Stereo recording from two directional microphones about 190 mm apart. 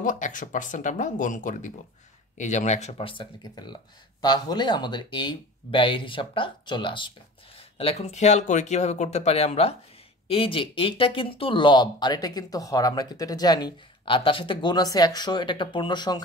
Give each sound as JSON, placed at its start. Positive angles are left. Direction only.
{"t": 0.0, "sound": "speech", "side_deg": 45}